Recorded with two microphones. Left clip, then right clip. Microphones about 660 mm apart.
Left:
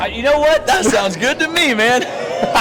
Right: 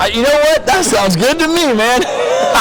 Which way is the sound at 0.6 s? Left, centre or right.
Right.